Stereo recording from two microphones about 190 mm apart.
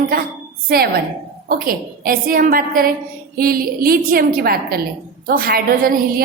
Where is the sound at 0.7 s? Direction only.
55° right (ahead or behind).